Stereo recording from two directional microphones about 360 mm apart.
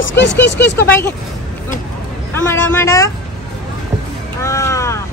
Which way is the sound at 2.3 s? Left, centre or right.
Centre.